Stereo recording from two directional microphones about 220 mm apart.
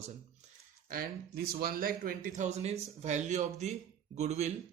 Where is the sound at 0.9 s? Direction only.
40° right (ahead or behind).